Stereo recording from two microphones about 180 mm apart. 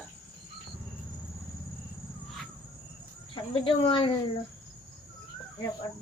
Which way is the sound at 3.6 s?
30° left (ahead or behind).